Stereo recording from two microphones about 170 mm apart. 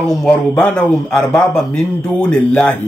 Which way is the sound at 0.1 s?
5° left (ahead or behind).